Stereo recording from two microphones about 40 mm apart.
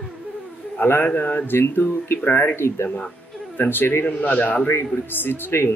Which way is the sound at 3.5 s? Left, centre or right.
Left.